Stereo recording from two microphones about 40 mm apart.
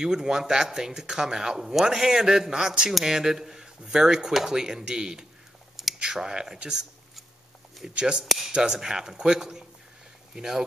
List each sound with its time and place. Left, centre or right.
0.0 s speech: centre
8.0 s speech: centre